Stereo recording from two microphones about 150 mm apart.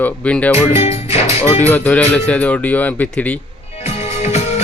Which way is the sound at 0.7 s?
45° left (ahead or behind).